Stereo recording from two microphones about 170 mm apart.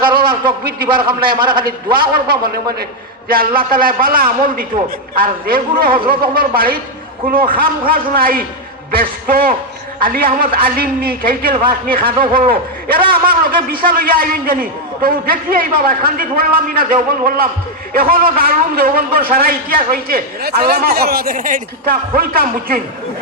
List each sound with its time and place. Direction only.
0.2 s a man's voice: 60° right (ahead or behind)